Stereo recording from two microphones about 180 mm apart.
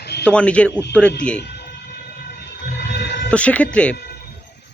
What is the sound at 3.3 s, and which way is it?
Speech, 5° left (ahead or behind).